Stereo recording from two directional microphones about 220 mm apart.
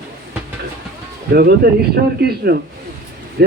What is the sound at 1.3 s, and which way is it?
Speech, 45° right (ahead or behind).